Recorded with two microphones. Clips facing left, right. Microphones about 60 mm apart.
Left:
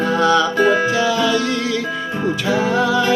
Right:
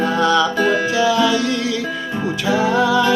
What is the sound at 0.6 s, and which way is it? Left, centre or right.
Music, left.